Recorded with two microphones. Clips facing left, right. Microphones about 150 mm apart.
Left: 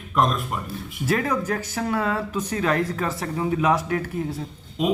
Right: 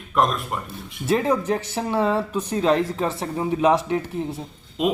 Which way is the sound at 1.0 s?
25° right (ahead or behind).